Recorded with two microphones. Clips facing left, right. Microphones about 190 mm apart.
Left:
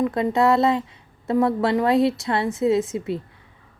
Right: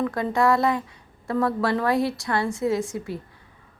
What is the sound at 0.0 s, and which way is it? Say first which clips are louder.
A woman's voice: left 3 dB; 20° left (ahead or behind).